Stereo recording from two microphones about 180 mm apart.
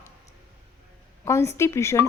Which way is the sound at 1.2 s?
15° left (ahead or behind).